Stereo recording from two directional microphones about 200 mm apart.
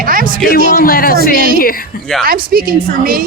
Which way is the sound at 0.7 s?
45° left (ahead or behind).